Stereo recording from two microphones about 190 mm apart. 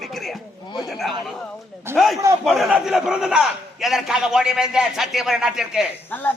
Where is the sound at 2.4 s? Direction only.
Centre (ahead or behind).